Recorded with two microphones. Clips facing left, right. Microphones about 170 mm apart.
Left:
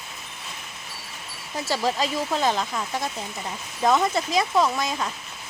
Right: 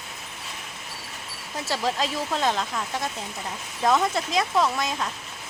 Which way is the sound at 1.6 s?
Centre (ahead or behind).